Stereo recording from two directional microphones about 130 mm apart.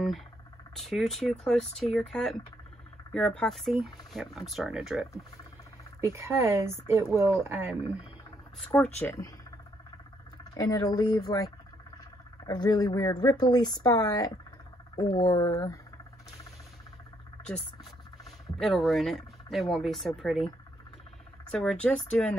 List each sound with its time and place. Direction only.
0.7 s speech: centre (ahead or behind)
5.9 s speech: 20° right (ahead or behind)
9.0 s speech: 25° left (ahead or behind)
10.5 s speech: 25° left (ahead or behind)
18.6 s speech: centre (ahead or behind)